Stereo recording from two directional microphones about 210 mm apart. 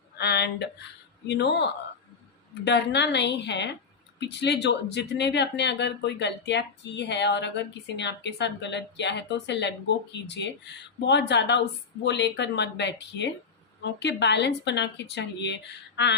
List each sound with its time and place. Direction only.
0.2 s speech: 50° left (ahead or behind)